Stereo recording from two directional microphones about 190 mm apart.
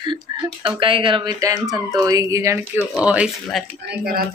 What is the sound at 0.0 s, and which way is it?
Speech, 25° right (ahead or behind).